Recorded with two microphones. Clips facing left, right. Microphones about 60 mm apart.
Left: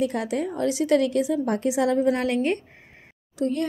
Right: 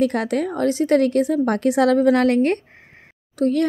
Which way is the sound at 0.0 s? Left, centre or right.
Right.